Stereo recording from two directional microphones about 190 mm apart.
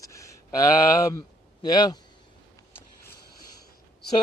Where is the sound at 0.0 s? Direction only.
15° left (ahead or behind).